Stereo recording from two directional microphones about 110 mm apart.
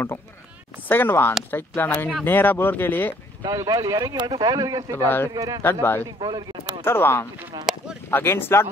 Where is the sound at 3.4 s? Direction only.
30° right (ahead or behind).